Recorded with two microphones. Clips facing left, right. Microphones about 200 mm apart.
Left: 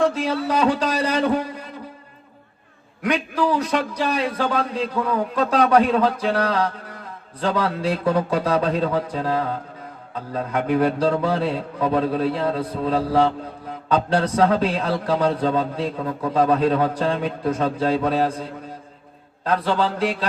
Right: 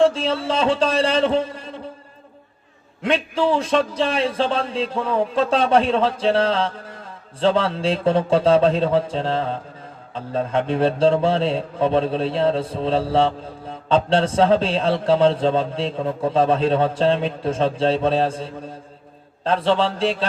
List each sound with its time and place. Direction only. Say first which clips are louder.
0.0 s a man's voice: right 2 dB; 25° right (ahead or behind)
3.0 s a man's voice: right 1 dB; 25° right (ahead or behind)
19.5 s a man's voice: right 2 dB; 25° right (ahead or behind)